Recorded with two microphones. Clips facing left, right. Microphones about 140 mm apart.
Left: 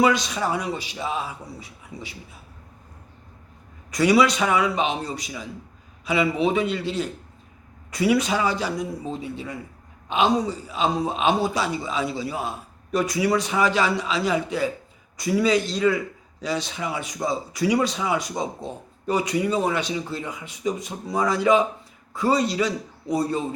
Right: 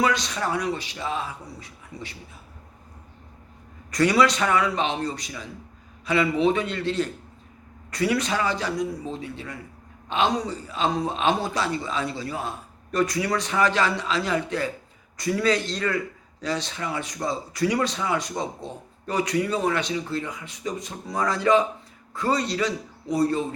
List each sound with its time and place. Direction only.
0.0 s a man's voice: 10° left (ahead or behind)
3.9 s a man's voice: 5° left (ahead or behind)